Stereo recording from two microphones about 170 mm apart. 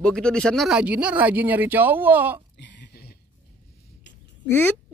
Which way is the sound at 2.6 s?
75° left (ahead or behind).